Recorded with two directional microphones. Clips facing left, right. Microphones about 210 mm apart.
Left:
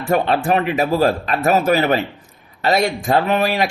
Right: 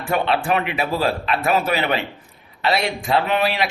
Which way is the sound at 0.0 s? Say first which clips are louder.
Left 3 dB; 40° left (ahead or behind).